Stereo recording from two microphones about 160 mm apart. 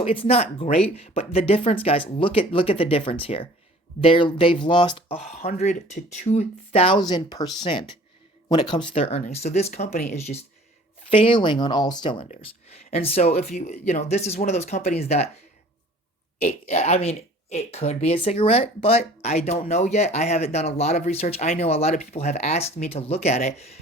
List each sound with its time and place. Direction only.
0.0 s speech: 35° left (ahead or behind)
16.4 s speech: 40° left (ahead or behind)